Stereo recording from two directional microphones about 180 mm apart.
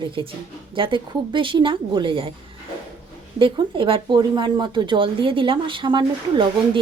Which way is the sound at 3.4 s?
30° right (ahead or behind).